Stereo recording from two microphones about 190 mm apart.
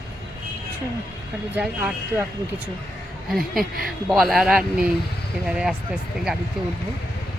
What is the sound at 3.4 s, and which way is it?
Speech, 50° right (ahead or behind).